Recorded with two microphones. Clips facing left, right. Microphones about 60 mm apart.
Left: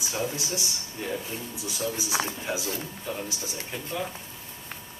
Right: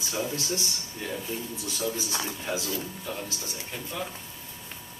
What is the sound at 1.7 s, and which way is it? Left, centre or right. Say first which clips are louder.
Speech: left 2 dB; centre.